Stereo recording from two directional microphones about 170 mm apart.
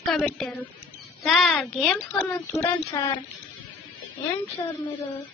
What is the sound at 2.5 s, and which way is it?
Speech, 20° left (ahead or behind).